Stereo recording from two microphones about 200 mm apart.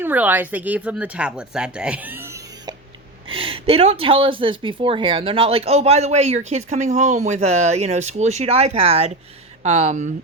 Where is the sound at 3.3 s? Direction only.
25° right (ahead or behind).